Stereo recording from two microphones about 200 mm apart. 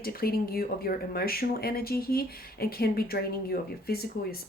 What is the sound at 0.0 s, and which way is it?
Speech, 50° left (ahead or behind).